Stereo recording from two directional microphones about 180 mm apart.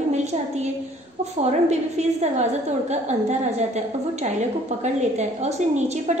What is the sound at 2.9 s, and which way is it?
Speech, 40° right (ahead or behind).